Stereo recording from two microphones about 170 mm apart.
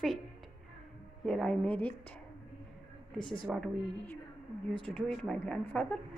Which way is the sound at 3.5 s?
5° left (ahead or behind).